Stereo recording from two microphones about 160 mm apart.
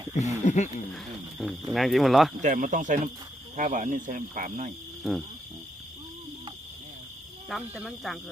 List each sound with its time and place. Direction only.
0.1 s speech: 45° left (ahead or behind)
0.9 s speech: centre (ahead or behind)
2.4 s speech: 50° right (ahead or behind)
5.0 s speech: centre (ahead or behind)
7.4 s speech: centre (ahead or behind)